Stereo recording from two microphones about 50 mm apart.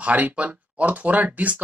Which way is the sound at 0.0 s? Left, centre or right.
Right.